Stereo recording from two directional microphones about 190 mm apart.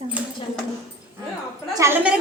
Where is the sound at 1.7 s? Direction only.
15° right (ahead or behind).